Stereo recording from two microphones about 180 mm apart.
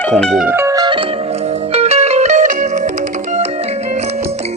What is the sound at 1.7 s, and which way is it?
Music, 35° right (ahead or behind).